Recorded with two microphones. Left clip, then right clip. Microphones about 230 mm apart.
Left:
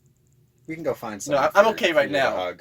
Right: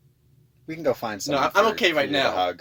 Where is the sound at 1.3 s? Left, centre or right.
Right.